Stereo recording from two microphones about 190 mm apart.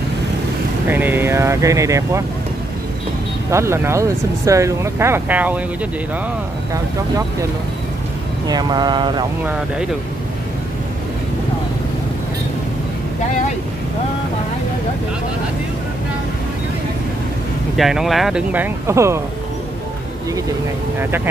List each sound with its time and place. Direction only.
0.8 s speech: 10° right (ahead or behind)
3.4 s speech: 15° right (ahead or behind)
8.5 s speech: 20° right (ahead or behind)
17.7 s speech: centre (ahead or behind)